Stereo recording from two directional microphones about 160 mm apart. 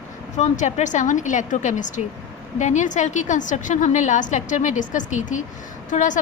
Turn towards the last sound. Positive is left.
turn(degrees=50)  # may be behind; listen again after turning